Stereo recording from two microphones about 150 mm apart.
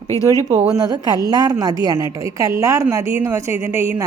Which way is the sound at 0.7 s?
25° right (ahead or behind).